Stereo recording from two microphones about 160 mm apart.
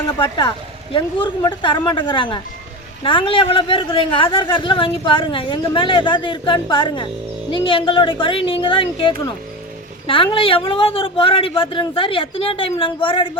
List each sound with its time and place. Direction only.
0.2 s speech: 30° left (ahead or behind)
10.3 s speech: 35° left (ahead or behind)